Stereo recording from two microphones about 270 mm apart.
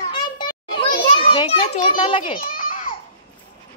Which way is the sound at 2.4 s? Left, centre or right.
Left.